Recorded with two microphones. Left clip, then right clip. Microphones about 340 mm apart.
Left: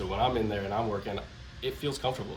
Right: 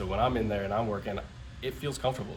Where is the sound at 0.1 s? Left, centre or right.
Centre.